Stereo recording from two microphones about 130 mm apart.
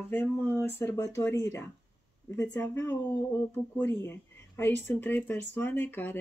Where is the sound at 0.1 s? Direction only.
15° left (ahead or behind).